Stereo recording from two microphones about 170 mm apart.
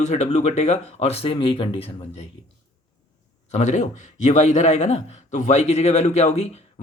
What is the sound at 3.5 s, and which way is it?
Speech, 45° left (ahead or behind).